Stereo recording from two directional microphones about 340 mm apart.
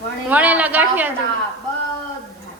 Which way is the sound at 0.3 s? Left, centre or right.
Centre.